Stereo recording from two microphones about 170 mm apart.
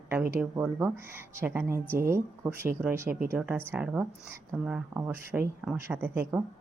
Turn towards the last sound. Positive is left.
turn(degrees=-15)  # may be behind; listen again after turning